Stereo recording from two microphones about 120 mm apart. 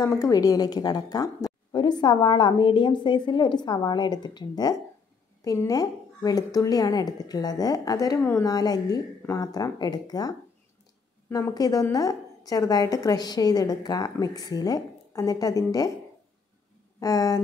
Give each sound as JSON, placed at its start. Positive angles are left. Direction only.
{"t": 0.0, "sound": "a woman's voice", "side_deg": 30}
{"t": 8.2, "sound": "speech", "side_deg": 20}
{"t": 8.5, "sound": "a woman's voice", "side_deg": 30}
{"t": 11.5, "sound": "a woman's voice", "side_deg": 30}
{"t": 17.0, "sound": "speech", "side_deg": 30}